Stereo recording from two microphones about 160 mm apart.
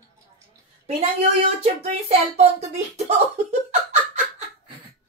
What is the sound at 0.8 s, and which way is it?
Speech, 45° right (ahead or behind).